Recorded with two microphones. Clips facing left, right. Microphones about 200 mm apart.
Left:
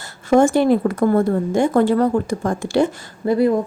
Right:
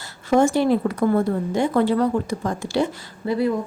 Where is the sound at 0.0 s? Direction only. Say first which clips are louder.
Left 3 dB; 50° left (ahead or behind).